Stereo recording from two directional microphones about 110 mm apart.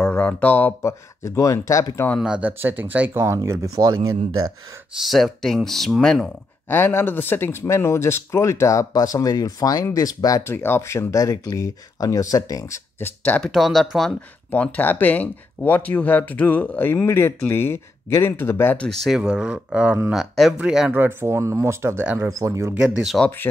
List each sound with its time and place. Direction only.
0.0 s speech: 15° left (ahead or behind)
0.8 s speech: 25° left (ahead or behind)
2.1 s speech: 10° right (ahead or behind); by 4.5 s 35° right (ahead or behind)
5.0 s speech: centre (ahead or behind)
6.7 s speech: 20° left (ahead or behind)
13.4 s speech: centre (ahead or behind)
14.5 s speech: 15° left (ahead or behind)
18.8 s speech: centre (ahead or behind)
20.1 s speech: centre (ahead or behind)
20.9 s speech: 20° right (ahead or behind)
22.8 s speech: 5° right (ahead or behind)
23.5 s speech: 25° left (ahead or behind)